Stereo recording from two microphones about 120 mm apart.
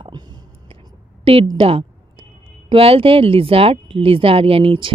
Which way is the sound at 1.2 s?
50° right (ahead or behind).